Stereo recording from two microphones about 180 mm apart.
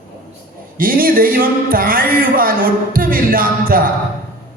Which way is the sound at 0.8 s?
55° right (ahead or behind).